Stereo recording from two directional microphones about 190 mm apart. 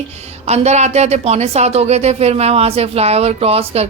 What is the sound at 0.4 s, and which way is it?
Speech, 35° right (ahead or behind).